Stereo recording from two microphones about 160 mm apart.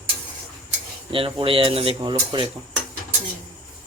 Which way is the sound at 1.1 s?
35° right (ahead or behind).